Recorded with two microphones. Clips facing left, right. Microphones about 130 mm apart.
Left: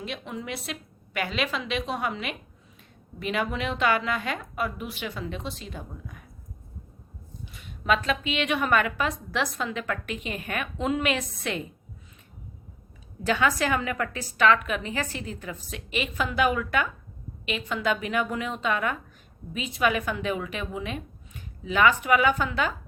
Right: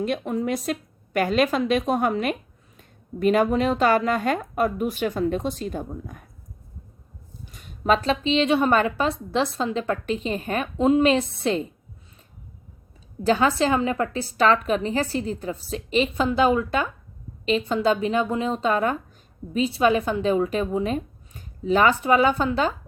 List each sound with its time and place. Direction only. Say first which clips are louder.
0.0 s a woman's voice: right 10 dB; 45° right (ahead or behind)
7.4 s a woman's voice: right 5 dB; 45° right (ahead or behind)
13.2 s a woman's voice: right 5 dB; 30° right (ahead or behind)